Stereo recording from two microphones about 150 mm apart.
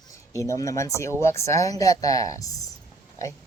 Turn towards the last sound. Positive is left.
turn(degrees=20)  # may be behind; listen again after turning